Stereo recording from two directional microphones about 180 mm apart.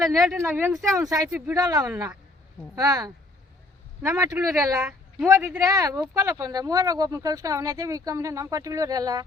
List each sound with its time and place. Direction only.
0.3 s speech: 10° right (ahead or behind)
0.7 s speech: centre (ahead or behind)
0.9 s speech: 20° right (ahead or behind)